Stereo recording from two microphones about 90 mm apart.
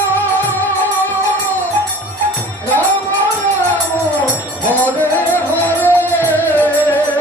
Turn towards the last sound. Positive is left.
turn(degrees=20)  # may be behind; listen again after turning